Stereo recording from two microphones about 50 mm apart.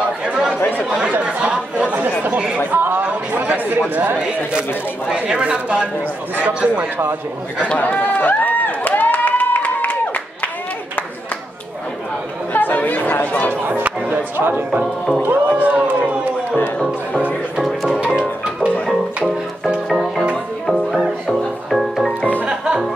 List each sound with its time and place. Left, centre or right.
1.2 s speech: centre
2.7 s a sound: right
3.9 s speech: right
5.3 s speech: right
7.6 s run: left
12.5 s chatter: left
14.1 s speech: right
14.5 s speech: right
15.2 s a sound: right
20.9 s music: centre
22.5 s music: centre